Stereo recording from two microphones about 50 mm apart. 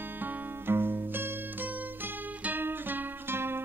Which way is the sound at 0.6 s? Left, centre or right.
Right.